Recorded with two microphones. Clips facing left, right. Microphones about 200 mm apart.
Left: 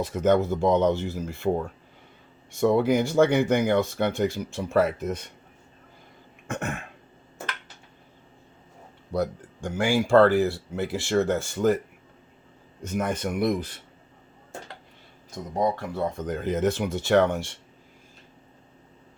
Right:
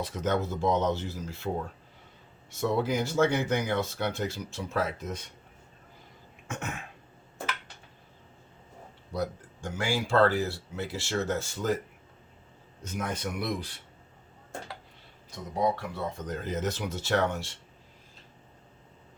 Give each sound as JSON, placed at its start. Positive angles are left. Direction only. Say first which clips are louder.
{"t": 0.0, "sound": "speech", "louder": "left 8 dB", "side_deg": 55}
{"t": 2.6, "sound": "speech", "louder": "left 7 dB", "side_deg": 55}
{"t": 6.5, "sound": "cough", "louder": "left 6 dB", "side_deg": 55}
{"t": 9.1, "sound": "speech", "louder": "left 5 dB", "side_deg": 55}
{"t": 12.8, "sound": "speech", "louder": "left 6 dB", "side_deg": 60}
{"t": 15.5, "sound": "speech", "louder": "left 3 dB", "side_deg": 50}